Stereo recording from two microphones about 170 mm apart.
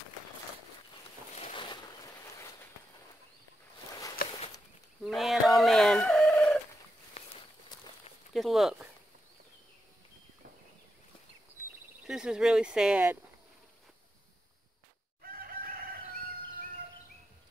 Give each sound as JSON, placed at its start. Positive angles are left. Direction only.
{"t": 1.4, "sound": "a sound", "side_deg": 30}
{"t": 4.2, "sound": "walk", "side_deg": 60}
{"t": 5.0, "sound": "fowl", "side_deg": 0}
{"t": 8.3, "sound": "speech", "side_deg": 0}
{"t": 12.1, "sound": "speech", "side_deg": -5}
{"t": 15.2, "sound": "chicken", "side_deg": -60}